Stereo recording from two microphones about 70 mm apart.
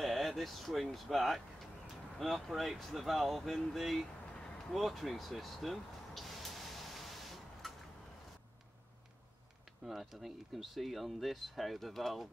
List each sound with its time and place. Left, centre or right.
0.0 s a sound: centre
0.9 s speech: centre
4.7 s vehicle: centre
9.8 s speech: centre